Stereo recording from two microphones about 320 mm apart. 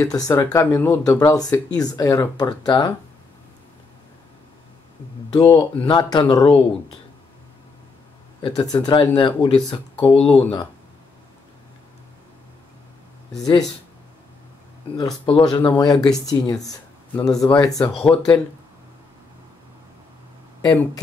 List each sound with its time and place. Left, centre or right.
0.0 s speech: centre
5.3 s speech: centre
8.4 s speech: centre
10.1 s speech: centre
15.0 s speech: centre